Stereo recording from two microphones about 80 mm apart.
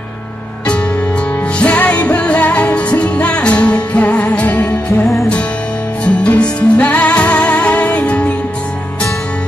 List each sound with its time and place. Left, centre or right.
1.6 s music: centre
6.0 s music: centre